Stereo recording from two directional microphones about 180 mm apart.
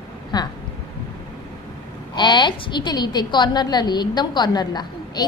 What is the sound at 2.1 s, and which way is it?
A woman's voice, 25° left (ahead or behind).